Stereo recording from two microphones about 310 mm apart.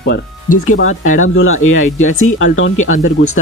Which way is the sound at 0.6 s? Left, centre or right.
Left.